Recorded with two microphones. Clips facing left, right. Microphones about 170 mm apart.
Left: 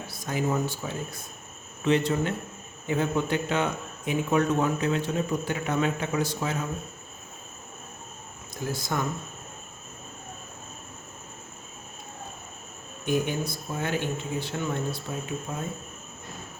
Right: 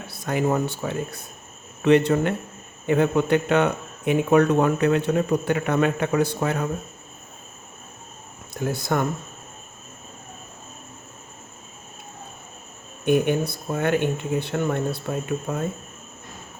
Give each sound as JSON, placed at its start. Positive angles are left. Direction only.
{"t": 0.1, "sound": "speech", "side_deg": -65}
{"t": 8.6, "sound": "speech", "side_deg": -60}
{"t": 13.1, "sound": "speech", "side_deg": -60}